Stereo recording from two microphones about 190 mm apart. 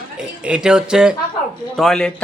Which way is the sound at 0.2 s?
5° right (ahead or behind).